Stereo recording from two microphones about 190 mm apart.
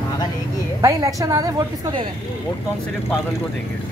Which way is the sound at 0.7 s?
15° right (ahead or behind).